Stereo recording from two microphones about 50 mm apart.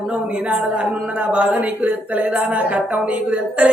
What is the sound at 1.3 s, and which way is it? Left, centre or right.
Speech, right.